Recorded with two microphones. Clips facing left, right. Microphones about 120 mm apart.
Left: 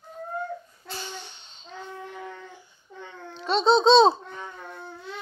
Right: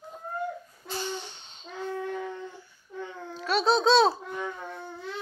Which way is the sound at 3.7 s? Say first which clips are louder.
Left 5 dB; 25° left (ahead or behind).